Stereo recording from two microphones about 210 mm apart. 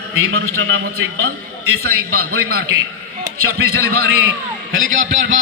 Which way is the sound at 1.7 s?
90° right.